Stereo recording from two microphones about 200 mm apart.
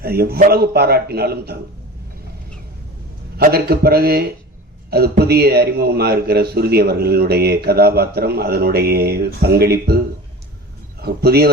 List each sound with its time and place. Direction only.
0.0 s a man's voice: 50° right (ahead or behind)
3.3 s a man's voice: 50° right (ahead or behind)
11.0 s a man's voice: 50° right (ahead or behind)